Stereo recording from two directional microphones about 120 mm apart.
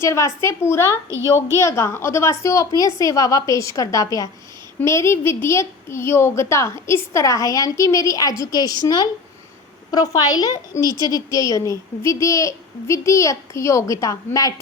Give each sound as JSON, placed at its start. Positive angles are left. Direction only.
{"t": 0.0, "sound": "a woman's voice", "side_deg": 25}